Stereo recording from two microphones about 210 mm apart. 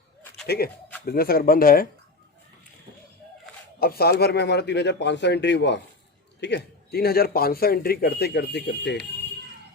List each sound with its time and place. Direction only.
0.4 s a man's voice: 50° left (ahead or behind)
3.8 s a man's voice: 45° left (ahead or behind)